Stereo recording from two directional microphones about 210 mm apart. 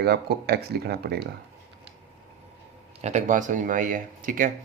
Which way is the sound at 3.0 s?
35° right (ahead or behind).